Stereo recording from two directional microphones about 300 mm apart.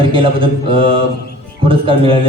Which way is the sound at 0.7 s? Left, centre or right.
Centre.